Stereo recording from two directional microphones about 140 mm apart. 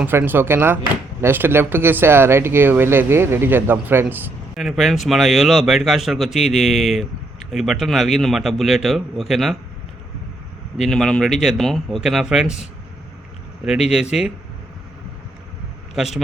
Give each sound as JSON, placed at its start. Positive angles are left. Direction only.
{"t": 0.0, "sound": "speech", "side_deg": -15}
{"t": 4.5, "sound": "speech", "side_deg": 0}
{"t": 10.8, "sound": "speech", "side_deg": 0}
{"t": 13.7, "sound": "speech", "side_deg": -5}
{"t": 16.0, "sound": "speech", "side_deg": -5}